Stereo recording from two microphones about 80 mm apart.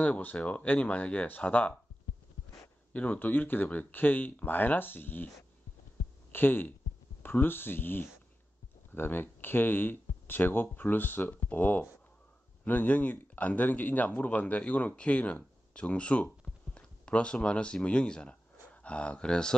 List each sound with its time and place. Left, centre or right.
0.0 s speech: centre
2.9 s speech: left
6.3 s speech: left; by 19.5 s centre